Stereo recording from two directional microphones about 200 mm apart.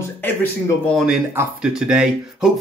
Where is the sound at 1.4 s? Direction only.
5° right (ahead or behind).